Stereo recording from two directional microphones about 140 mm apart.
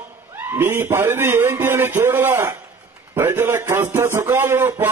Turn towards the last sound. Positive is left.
turn(degrees=-15)  # may be behind; listen again after turning